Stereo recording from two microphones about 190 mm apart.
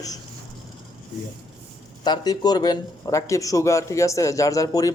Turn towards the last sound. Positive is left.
turn(degrees=15)  # may be behind; listen again after turning